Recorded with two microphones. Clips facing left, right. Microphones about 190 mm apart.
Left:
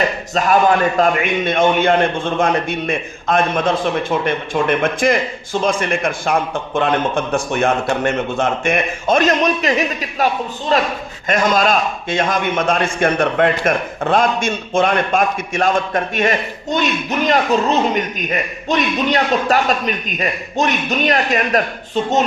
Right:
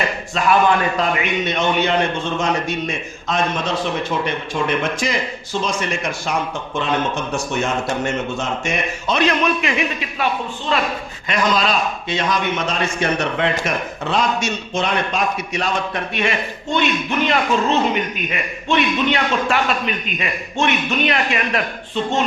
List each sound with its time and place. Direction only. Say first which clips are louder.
0.3 s a man's voice: left 2 dB; 40° left (ahead or behind)